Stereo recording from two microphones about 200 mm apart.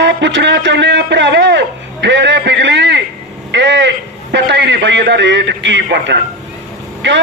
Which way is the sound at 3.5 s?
60° right (ahead or behind).